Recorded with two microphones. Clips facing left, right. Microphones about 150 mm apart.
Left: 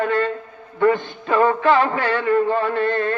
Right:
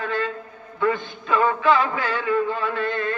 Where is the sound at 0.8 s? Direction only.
50° left (ahead or behind).